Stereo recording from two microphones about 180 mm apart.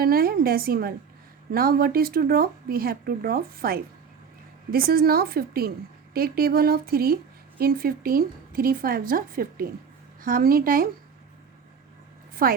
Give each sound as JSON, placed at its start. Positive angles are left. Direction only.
{"t": 0.0, "sound": "a woman's voice", "side_deg": -55}
{"t": 12.3, "sound": "a woman's voice", "side_deg": -55}